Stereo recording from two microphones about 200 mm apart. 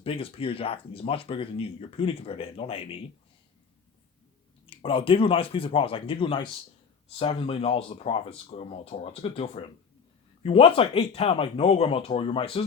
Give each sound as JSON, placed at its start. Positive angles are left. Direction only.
{"t": 0.0, "sound": "speech", "side_deg": 30}
{"t": 4.6, "sound": "speech", "side_deg": 25}